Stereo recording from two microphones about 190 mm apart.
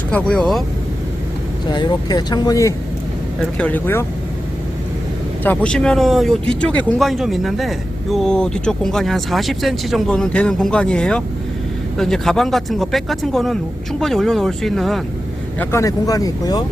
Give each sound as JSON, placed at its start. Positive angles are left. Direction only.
{"t": 0.1, "sound": "speech", "side_deg": 5}
{"t": 1.7, "sound": "speech", "side_deg": 25}
{"t": 3.4, "sound": "speech", "side_deg": 5}
{"t": 5.4, "sound": "speech", "side_deg": 10}
{"t": 15.5, "sound": "speech", "side_deg": 15}